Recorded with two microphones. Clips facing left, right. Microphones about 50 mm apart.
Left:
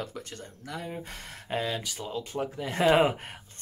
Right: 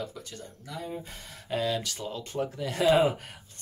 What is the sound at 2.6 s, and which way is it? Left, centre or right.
Speech, left.